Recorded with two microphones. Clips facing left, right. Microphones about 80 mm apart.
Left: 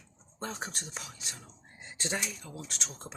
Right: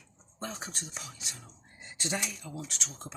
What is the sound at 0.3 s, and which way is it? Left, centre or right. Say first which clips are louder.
Speech: left 1 dB; left.